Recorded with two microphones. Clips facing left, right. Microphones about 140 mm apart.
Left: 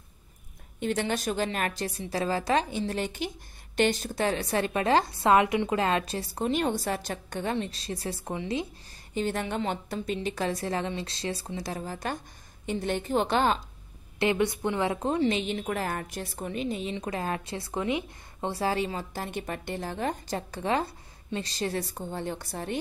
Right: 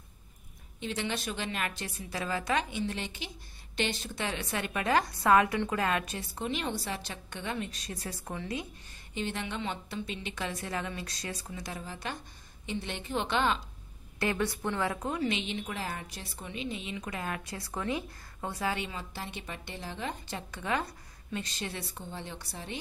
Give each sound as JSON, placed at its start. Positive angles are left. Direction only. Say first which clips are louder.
{"t": 0.7, "sound": "a woman's voice", "louder": "left 6 dB", "side_deg": 50}
{"t": 9.1, "sound": "a woman's voice", "louder": "left 6 dB", "side_deg": 45}
{"t": 14.2, "sound": "a woman's voice", "louder": "left 5 dB", "side_deg": 20}